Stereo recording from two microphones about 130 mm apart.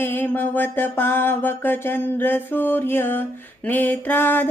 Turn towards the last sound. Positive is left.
turn(degrees=15)  # may be behind; listen again after turning